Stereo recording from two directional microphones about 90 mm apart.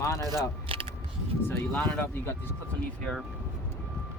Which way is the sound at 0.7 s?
90° right.